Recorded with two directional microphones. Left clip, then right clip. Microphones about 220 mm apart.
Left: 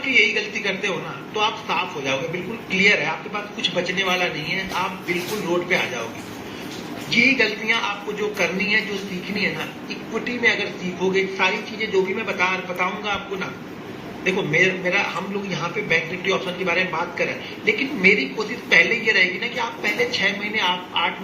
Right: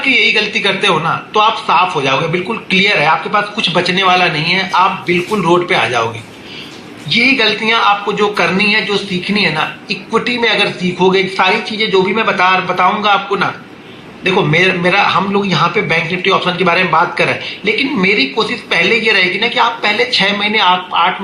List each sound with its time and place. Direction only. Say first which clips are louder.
0.0 s a man's voice: right 7 dB; 50° right (ahead or behind)
7.1 s a man's voice: right 7 dB; 50° right (ahead or behind)